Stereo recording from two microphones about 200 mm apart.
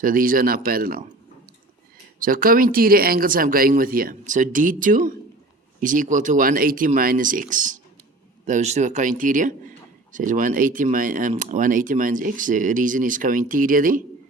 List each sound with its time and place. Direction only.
0.0 s speech: 45° right (ahead or behind)
2.1 s speech: 45° right (ahead or behind)